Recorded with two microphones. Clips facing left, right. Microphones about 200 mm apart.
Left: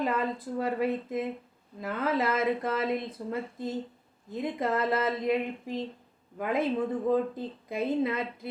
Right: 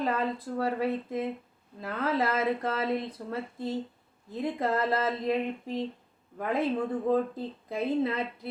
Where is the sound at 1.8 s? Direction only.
15° left (ahead or behind).